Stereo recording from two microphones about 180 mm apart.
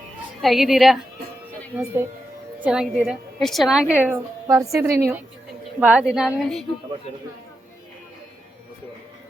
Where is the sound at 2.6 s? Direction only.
5° right (ahead or behind).